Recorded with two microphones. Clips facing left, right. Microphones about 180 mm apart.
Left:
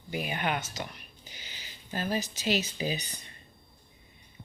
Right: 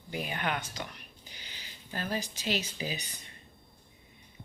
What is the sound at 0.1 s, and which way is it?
Speech, 15° left (ahead or behind).